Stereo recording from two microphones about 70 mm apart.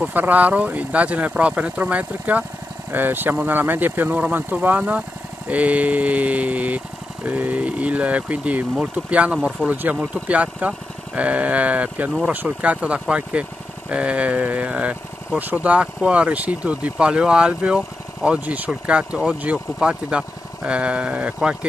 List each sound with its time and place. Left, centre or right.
0.0 s speech: right